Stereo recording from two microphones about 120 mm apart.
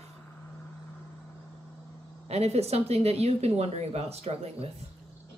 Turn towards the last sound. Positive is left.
turn(degrees=-55)  # may be behind; listen again after turning